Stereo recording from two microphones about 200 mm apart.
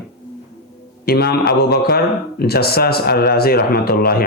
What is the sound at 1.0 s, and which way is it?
A man's voice, 50° left (ahead or behind).